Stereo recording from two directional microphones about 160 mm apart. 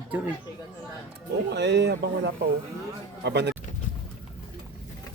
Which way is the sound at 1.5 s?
90° right.